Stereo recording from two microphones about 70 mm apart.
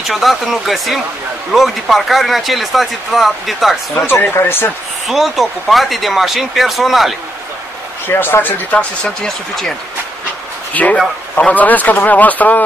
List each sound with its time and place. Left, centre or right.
0.1 s speech: centre
4.0 s speech: left
5.0 s speech: centre
8.1 s a man's voice: left
9.0 s speech: centre
10.7 s a man's voice: left